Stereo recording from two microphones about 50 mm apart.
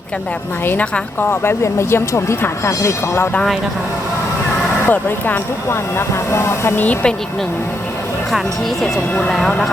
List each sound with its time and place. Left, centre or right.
1.6 s speech: left
2.6 s speech: left
4.9 s speech: left